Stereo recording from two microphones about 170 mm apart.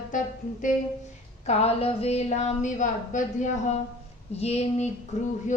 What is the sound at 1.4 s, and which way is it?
A woman's voice, 35° left (ahead or behind).